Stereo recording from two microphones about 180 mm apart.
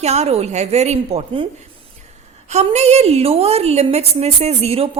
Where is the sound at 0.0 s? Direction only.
35° right (ahead or behind).